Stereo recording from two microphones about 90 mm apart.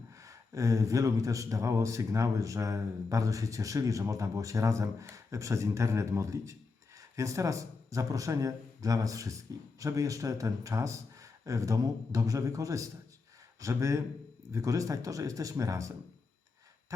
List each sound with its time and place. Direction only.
0.2 s speech: 35° right (ahead or behind)